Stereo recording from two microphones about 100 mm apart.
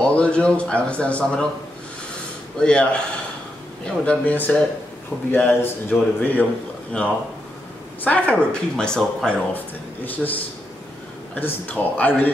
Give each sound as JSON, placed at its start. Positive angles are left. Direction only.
{"t": 0.0, "sound": "speech", "side_deg": 10}
{"t": 2.6, "sound": "speech", "side_deg": 10}